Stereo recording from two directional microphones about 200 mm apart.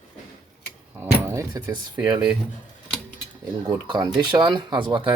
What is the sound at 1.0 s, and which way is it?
Speech, 15° right (ahead or behind).